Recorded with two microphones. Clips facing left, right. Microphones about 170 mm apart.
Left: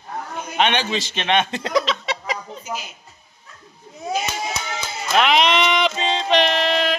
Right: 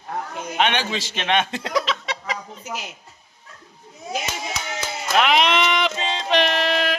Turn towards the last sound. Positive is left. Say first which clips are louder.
# left 2 dB
turn(degrees=-5)  # may be behind; listen again after turning